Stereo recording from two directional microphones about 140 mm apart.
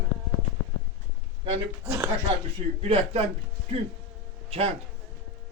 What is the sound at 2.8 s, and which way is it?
Speech, 50° right (ahead or behind).